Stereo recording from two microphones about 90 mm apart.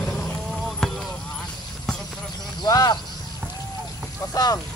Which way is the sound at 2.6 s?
50° left (ahead or behind).